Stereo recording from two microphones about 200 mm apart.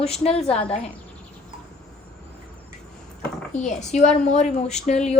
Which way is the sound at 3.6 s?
35° left (ahead or behind).